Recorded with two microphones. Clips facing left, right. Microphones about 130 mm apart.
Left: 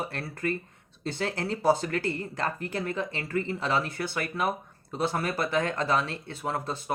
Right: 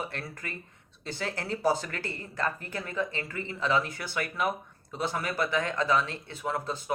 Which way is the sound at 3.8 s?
55° left (ahead or behind).